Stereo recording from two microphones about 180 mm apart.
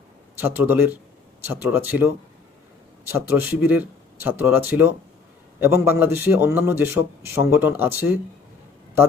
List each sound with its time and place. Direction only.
0.3 s a man's voice: 10° right (ahead or behind)